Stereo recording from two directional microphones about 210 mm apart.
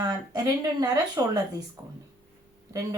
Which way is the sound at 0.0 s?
20° right (ahead or behind).